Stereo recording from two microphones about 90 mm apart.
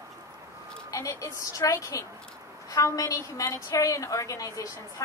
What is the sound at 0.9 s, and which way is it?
A woman's voice, 35° left (ahead or behind).